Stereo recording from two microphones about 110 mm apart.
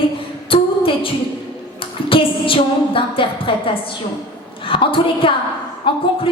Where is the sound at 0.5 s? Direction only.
55° left (ahead or behind).